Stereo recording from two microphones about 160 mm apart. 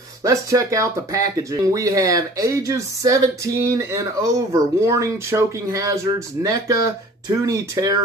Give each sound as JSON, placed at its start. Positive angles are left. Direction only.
{"t": 0.2, "sound": "speech", "side_deg": -20}